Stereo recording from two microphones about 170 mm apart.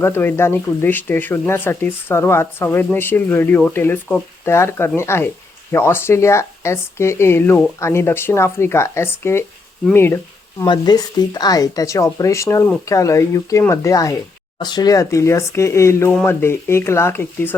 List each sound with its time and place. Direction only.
0.0 s speech: 15° left (ahead or behind)
10.6 s speech: 25° left (ahead or behind)